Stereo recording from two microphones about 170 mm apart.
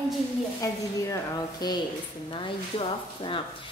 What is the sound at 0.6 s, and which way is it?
A woman's voice, 20° left (ahead or behind).